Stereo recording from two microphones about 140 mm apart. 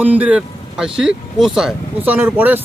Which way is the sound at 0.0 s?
10° right (ahead or behind).